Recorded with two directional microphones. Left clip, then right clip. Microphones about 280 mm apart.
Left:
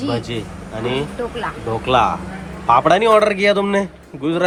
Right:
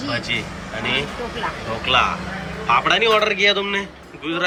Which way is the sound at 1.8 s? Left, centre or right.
Centre.